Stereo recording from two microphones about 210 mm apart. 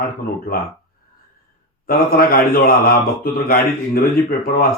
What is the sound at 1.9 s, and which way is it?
Speech, 45° left (ahead or behind).